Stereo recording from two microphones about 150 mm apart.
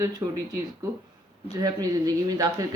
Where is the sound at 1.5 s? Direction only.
25° right (ahead or behind).